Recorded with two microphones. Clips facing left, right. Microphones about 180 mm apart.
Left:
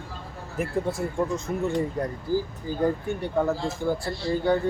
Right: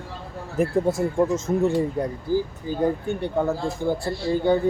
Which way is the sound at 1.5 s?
35° right (ahead or behind).